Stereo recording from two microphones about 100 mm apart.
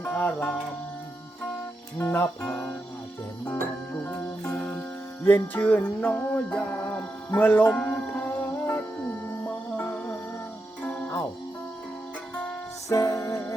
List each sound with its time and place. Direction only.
0.0 s music: 10° left (ahead or behind)
2.0 s music: 20° left (ahead or behind)
2.4 s speech: 5° left (ahead or behind)
3.4 s music: 20° left (ahead or behind)
5.2 s music: 15° left (ahead or behind)
9.7 s music: 10° left (ahead or behind)
12.3 s music: 10° left (ahead or behind)
12.9 s music: 30° left (ahead or behind)